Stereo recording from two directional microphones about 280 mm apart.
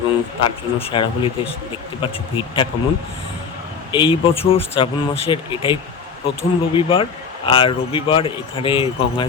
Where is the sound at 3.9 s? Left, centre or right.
Centre.